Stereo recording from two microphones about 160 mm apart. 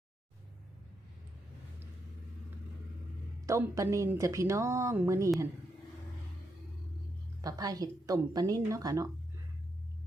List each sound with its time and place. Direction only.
3.4 s a woman's voice: 20° right (ahead or behind)
7.4 s a woman's voice: 25° right (ahead or behind)